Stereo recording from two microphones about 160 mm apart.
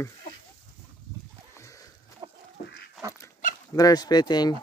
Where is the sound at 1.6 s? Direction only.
20° left (ahead or behind).